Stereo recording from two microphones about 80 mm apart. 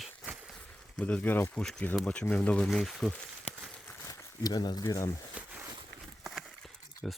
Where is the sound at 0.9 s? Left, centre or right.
Centre.